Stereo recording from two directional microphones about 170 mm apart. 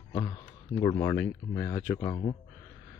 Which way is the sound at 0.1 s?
30° left (ahead or behind).